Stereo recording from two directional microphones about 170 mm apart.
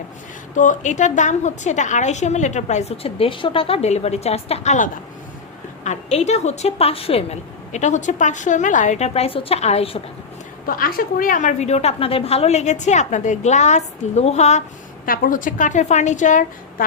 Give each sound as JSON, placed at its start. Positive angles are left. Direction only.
{"t": 0.5, "sound": "a woman's voice", "side_deg": 50}
{"t": 10.7, "sound": "a woman's voice", "side_deg": 60}
{"t": 15.0, "sound": "a woman's voice", "side_deg": 55}